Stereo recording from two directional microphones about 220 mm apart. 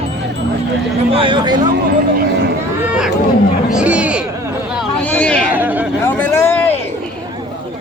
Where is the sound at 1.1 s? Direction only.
25° right (ahead or behind).